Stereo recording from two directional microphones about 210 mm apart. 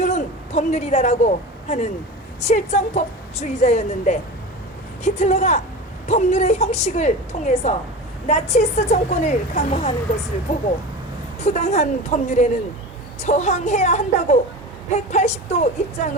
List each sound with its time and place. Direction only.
0.0 s a woman's voice: 35° left (ahead or behind)
11.3 s a woman's voice: 30° left (ahead or behind)